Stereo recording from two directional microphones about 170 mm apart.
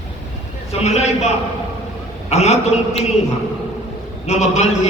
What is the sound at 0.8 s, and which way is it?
A man's voice, 40° left (ahead or behind).